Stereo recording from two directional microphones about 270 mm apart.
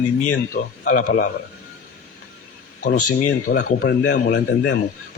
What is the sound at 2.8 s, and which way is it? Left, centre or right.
A man's voice, left.